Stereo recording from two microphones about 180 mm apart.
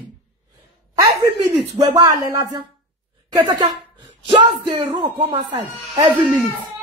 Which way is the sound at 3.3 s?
25° right (ahead or behind).